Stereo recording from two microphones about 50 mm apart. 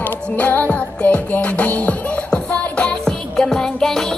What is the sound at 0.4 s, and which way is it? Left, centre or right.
Music, left.